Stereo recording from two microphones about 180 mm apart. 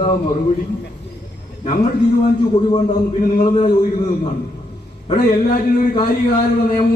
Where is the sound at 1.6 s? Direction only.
40° left (ahead or behind).